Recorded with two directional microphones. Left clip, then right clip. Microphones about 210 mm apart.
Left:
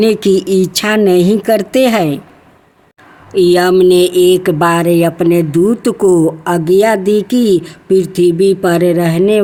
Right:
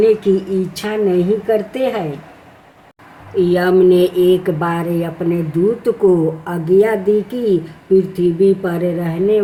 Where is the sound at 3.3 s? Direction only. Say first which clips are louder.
Left 5 dB; 50° left (ahead or behind).